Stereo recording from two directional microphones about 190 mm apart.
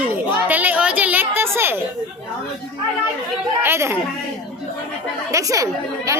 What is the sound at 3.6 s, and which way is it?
Speech, 15° right (ahead or behind).